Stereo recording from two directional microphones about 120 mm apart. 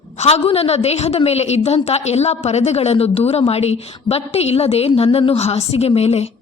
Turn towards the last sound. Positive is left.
turn(degrees=60)  # may be behind; listen again after turning